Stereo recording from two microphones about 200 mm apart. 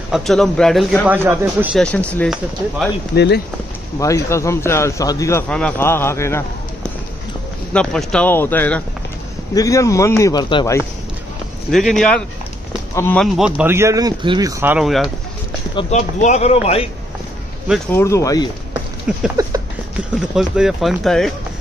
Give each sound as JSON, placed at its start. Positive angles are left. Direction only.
{"t": 0.1, "sound": "a man's voice", "side_deg": 0}
{"t": 1.8, "sound": "speech", "side_deg": 5}
{"t": 3.2, "sound": "speech", "side_deg": 55}
{"t": 4.0, "sound": "speech", "side_deg": 15}
{"t": 5.5, "sound": "speech", "side_deg": 5}
{"t": 7.7, "sound": "speech", "side_deg": 5}
{"t": 11.9, "sound": "a man's voice", "side_deg": 5}
{"t": 14.6, "sound": "a man's voice", "side_deg": -5}
{"t": 15.7, "sound": "speech", "side_deg": 30}
{"t": 17.9, "sound": "speech", "side_deg": 15}
{"t": 19.1, "sound": "a man's voice", "side_deg": -5}